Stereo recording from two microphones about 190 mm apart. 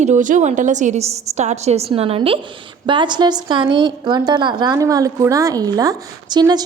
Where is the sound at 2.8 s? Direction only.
25° right (ahead or behind).